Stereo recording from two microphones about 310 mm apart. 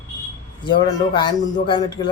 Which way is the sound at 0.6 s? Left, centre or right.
Centre.